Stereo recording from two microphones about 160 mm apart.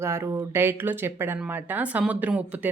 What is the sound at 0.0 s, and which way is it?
Speech, 20° right (ahead or behind).